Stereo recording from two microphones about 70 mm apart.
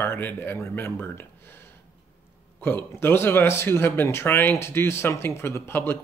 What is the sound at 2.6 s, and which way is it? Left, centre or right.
Speech, left.